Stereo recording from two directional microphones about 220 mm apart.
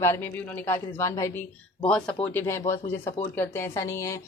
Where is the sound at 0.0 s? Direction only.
10° left (ahead or behind).